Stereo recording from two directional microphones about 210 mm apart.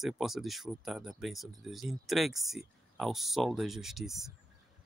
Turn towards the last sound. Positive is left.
turn(degrees=0)  # may be behind; listen again after turning